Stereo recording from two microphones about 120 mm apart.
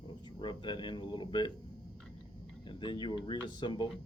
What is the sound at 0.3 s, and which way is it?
Speech, 40° left (ahead or behind).